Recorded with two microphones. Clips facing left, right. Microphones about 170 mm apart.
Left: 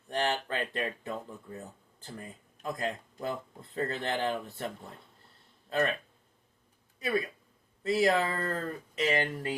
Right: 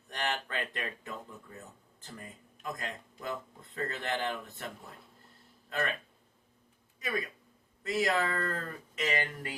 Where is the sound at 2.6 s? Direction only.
35° left (ahead or behind).